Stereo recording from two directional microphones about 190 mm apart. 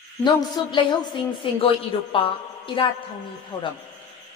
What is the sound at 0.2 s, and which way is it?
A woman's voice, 25° left (ahead or behind).